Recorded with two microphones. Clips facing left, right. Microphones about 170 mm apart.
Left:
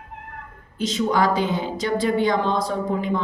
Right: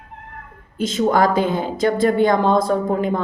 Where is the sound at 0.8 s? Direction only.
50° right (ahead or behind).